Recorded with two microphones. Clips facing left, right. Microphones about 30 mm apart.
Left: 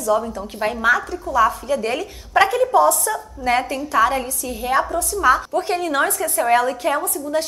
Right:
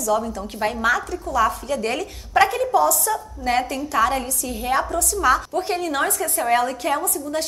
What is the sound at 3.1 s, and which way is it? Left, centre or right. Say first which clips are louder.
A woman's voice: left 2 dB; centre.